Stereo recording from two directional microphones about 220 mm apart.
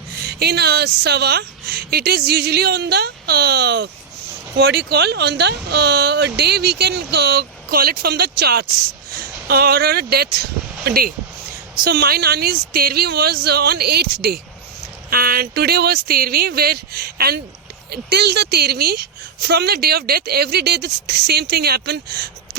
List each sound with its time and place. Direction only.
0.3 s a woman's voice: 45° right (ahead or behind)